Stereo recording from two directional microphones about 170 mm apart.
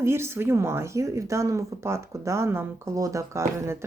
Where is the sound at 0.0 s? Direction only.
15° right (ahead or behind).